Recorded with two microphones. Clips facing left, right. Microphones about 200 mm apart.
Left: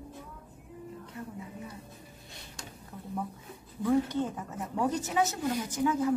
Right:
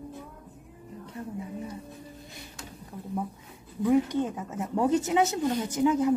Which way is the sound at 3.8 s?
15° right (ahead or behind).